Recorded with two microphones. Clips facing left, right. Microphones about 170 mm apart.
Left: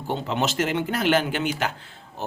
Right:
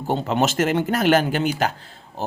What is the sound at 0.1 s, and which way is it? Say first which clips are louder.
Speech: right 4 dB; 45° right (ahead or behind).